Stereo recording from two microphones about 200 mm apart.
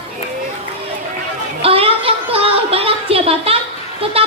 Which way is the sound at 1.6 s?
30° right (ahead or behind).